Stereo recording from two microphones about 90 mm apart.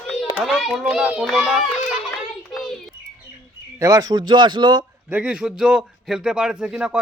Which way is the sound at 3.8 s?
40° right (ahead or behind).